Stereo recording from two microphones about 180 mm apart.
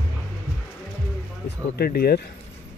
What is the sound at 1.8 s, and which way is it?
Speech, 60° left (ahead or behind).